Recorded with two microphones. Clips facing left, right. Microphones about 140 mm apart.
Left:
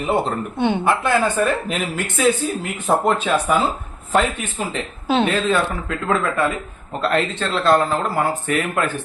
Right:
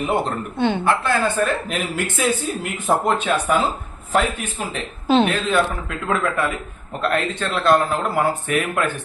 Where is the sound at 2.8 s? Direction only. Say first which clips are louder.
Left 1 dB; centre (ahead or behind).